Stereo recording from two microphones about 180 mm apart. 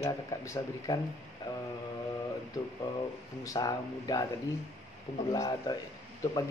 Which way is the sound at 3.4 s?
20° left (ahead or behind).